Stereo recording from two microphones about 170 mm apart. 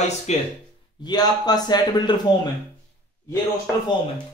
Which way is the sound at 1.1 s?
25° left (ahead or behind).